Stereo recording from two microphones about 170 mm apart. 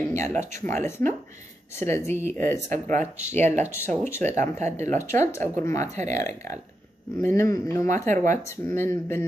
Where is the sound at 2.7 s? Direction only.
45° right (ahead or behind).